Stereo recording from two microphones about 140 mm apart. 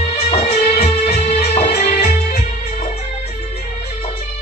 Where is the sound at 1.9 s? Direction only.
65° left (ahead or behind).